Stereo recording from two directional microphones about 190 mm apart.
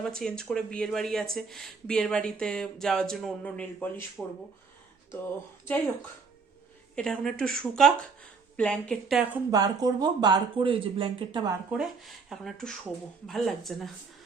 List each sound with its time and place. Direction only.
0.0 s speech: 5° left (ahead or behind)
6.9 s speech: 5° left (ahead or behind)
9.5 s speech: 20° right (ahead or behind)
11.7 s speech: centre (ahead or behind)